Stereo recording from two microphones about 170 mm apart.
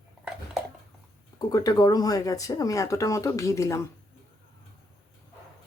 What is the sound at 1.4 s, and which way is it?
Speech, 20° left (ahead or behind).